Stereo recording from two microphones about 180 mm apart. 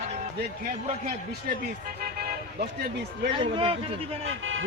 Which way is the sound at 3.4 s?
30° right (ahead or behind).